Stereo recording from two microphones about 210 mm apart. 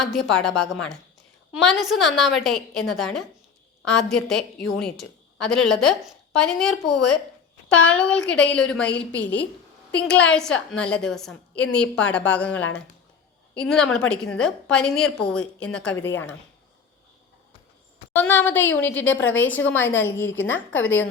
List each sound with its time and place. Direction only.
0.0 s a woman's voice: centre (ahead or behind)
18.1 s a woman's voice: 10° left (ahead or behind)
19.1 s a woman's voice: 65° left (ahead or behind)
19.4 s a woman's voice: 10° left (ahead or behind)
20.2 s a woman's voice: 65° left (ahead or behind)
20.5 s a woman's voice: 10° left (ahead or behind)